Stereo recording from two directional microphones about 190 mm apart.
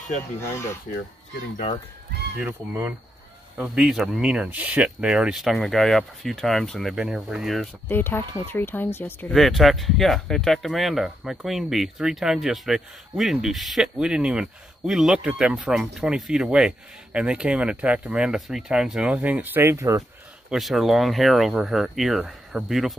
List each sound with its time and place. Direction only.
2.4 s speech: 15° right (ahead or behind)
20.4 s speech: centre (ahead or behind)